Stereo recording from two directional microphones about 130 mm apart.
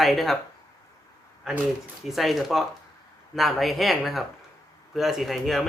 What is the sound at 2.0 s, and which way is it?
Speech, centre (ahead or behind).